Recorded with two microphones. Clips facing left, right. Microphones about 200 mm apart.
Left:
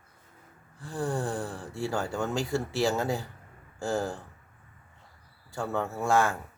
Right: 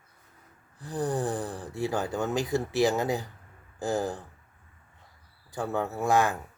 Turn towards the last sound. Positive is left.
turn(degrees=-15)  # may be behind; listen again after turning